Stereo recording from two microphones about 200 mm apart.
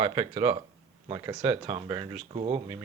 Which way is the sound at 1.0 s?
20° right (ahead or behind).